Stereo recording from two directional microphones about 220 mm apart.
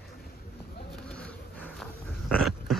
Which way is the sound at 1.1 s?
5° left (ahead or behind).